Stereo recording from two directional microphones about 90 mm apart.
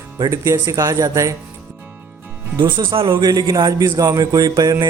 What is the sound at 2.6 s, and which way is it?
Speech, 65° right (ahead or behind).